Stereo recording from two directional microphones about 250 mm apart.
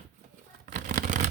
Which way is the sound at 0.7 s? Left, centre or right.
Right.